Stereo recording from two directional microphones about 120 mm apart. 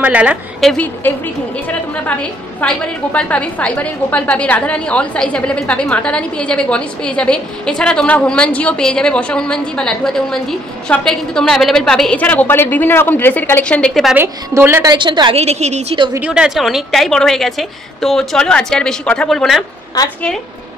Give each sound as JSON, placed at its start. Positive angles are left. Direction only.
{"t": 0.0, "sound": "a woman's voice", "side_deg": -10}
{"t": 0.7, "sound": "a woman's voice", "side_deg": 15}
{"t": 14.1, "sound": "a woman's voice", "side_deg": -20}
{"t": 14.9, "sound": "a woman's voice", "side_deg": -40}
{"t": 15.3, "sound": "a woman's voice", "side_deg": -65}
{"t": 16.2, "sound": "a woman's voice", "side_deg": -10}